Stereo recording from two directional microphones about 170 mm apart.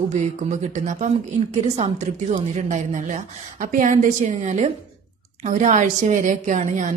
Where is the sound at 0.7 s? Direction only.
45° right (ahead or behind).